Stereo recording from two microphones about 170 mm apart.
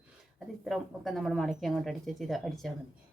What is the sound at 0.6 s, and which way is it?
Speech, centre (ahead or behind).